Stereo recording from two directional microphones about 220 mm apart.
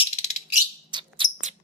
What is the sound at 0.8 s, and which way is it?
Bird, 20° right (ahead or behind).